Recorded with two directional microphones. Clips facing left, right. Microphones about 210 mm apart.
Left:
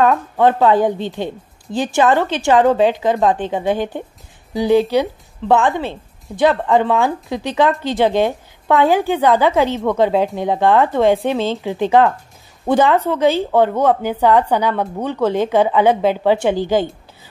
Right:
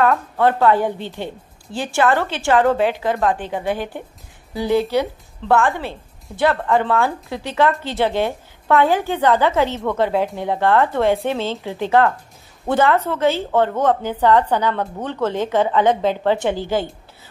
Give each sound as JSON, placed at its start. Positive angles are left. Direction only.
{"t": 0.0, "sound": "a woman's voice", "side_deg": 20}